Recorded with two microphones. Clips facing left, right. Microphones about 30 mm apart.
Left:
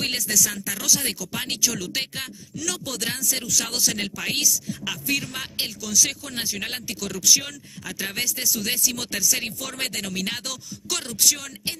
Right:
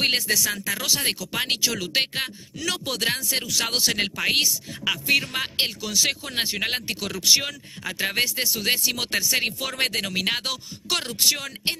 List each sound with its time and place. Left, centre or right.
0.0 s speech: right